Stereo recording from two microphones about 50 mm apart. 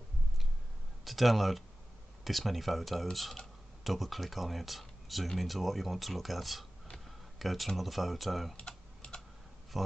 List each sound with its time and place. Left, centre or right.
1.0 s speech: centre
8.5 s typing: centre
9.7 s speech: centre